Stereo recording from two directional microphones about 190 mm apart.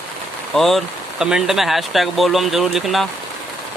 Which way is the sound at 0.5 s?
Centre (ahead or behind).